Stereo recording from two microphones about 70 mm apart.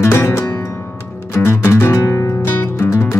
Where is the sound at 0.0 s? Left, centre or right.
Left.